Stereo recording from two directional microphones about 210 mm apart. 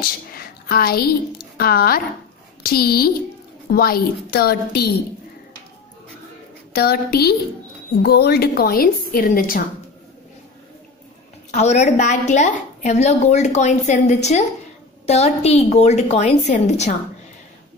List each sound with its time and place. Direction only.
0.0 s a sound: 45° left (ahead or behind)
1.6 s a woman's voice: 45° left (ahead or behind)
6.7 s a woman's voice: 50° left (ahead or behind)
11.5 s a woman's voice: 30° left (ahead or behind)